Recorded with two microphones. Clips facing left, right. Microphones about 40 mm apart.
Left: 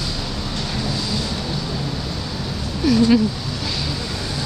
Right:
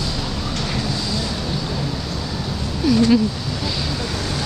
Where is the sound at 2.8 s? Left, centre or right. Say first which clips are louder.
Even; centre.